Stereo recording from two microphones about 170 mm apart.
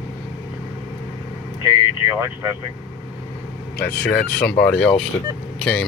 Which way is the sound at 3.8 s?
60° left (ahead or behind).